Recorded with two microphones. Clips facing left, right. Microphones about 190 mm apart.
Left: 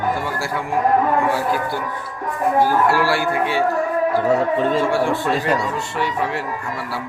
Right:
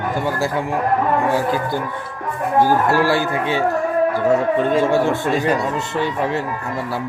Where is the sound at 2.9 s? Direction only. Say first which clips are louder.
Right 2 dB; 20° right (ahead or behind).